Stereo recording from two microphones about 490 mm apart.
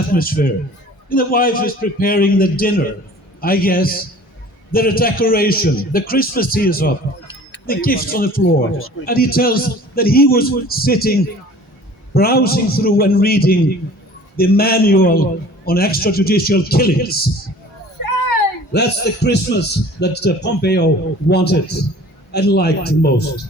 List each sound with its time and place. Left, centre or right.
0.1 s a man's voice: centre
18.0 s a sound: left
18.7 s a man's voice: centre